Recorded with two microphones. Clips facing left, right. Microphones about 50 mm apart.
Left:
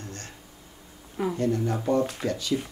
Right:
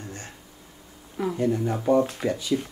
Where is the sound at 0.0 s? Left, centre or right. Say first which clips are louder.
Right 2 dB; centre.